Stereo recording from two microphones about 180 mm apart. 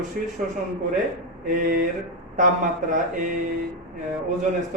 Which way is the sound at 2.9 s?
45° right (ahead or behind).